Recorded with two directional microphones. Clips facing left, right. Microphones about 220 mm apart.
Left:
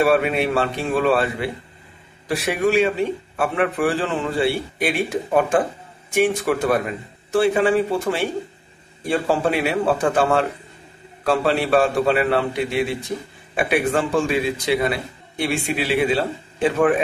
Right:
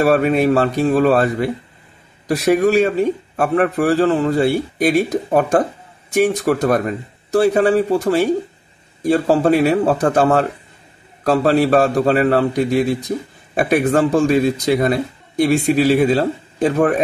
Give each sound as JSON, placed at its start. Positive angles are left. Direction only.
{"t": 0.0, "sound": "a man's voice", "side_deg": -40}